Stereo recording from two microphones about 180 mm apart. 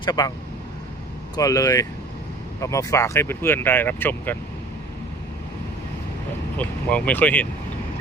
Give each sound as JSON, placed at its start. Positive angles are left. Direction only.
{"t": 0.0, "sound": "speech", "side_deg": 20}
{"t": 1.4, "sound": "speech", "side_deg": 20}
{"t": 6.6, "sound": "speech", "side_deg": 10}